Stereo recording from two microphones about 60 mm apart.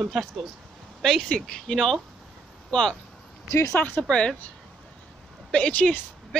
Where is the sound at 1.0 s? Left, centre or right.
Centre.